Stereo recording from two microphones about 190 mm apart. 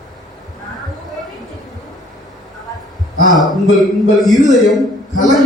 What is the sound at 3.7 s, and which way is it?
A man's voice, centre (ahead or behind).